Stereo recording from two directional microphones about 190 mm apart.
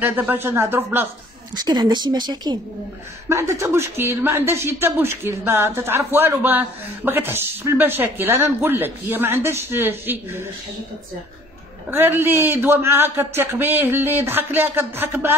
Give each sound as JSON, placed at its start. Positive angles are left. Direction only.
{"t": 0.0, "sound": "a man's voice", "side_deg": -10}
{"t": 1.5, "sound": "a woman's voice", "side_deg": -20}
{"t": 11.9, "sound": "a man's voice", "side_deg": -10}